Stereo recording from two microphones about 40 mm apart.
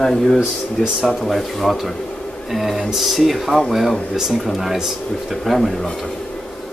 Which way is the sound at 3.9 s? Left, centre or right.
Left.